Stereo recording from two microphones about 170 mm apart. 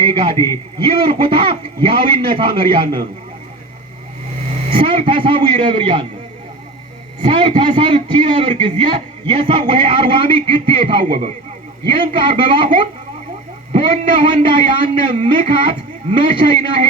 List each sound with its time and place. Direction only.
0.0 s a man's voice: 30° right (ahead or behind)
0.3 s a man's voice: 15° left (ahead or behind)
0.8 s a man's voice: 30° right (ahead or behind)
4.7 s a man's voice: 30° right (ahead or behind)
7.2 s a man's voice: 30° right (ahead or behind)